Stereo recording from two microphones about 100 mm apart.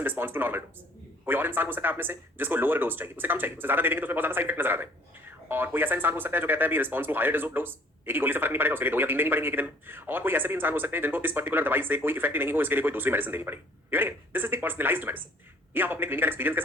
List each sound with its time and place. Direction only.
0.0 s speech: 20° right (ahead or behind)